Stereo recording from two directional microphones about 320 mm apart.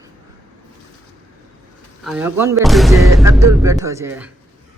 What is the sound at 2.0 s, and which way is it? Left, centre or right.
A man's voice, centre.